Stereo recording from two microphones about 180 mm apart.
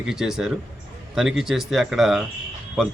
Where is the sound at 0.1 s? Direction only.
5° right (ahead or behind).